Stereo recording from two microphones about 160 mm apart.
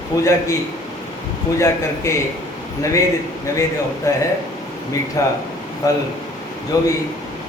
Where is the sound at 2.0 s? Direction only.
20° left (ahead or behind).